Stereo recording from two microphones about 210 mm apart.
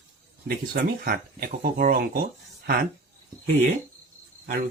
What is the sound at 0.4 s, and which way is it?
Speech, 45° right (ahead or behind).